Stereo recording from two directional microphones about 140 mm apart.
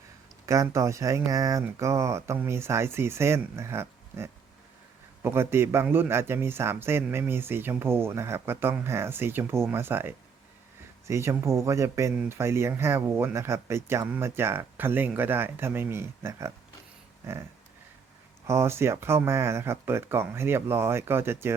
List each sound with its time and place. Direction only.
0.4 s speech: 20° right (ahead or behind)
18.4 s speech: 20° right (ahead or behind)